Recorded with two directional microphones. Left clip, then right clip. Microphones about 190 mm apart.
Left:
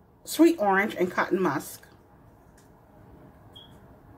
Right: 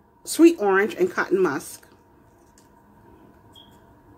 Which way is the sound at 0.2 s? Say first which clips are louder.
Right 4 dB; 45° right (ahead or behind).